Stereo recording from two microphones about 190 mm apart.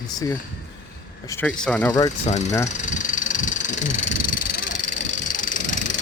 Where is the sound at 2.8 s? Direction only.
40° left (ahead or behind).